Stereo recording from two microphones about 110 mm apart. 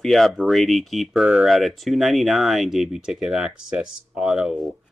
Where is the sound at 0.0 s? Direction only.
Centre (ahead or behind).